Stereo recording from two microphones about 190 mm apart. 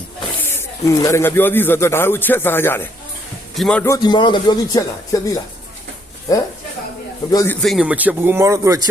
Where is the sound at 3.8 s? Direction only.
20° left (ahead or behind).